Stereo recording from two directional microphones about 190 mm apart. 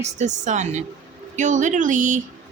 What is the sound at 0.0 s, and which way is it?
A woman's voice, 40° right (ahead or behind).